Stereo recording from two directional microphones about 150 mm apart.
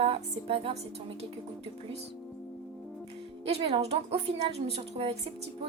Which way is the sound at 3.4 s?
45° right (ahead or behind).